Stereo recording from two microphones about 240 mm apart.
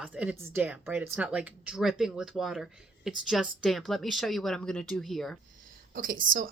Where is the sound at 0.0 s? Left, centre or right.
Centre.